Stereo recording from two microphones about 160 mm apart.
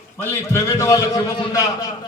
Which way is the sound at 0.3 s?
15° left (ahead or behind).